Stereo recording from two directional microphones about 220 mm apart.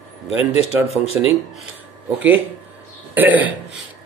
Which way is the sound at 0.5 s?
30° left (ahead or behind).